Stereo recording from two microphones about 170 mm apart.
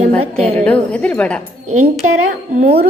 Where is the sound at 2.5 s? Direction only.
45° right (ahead or behind).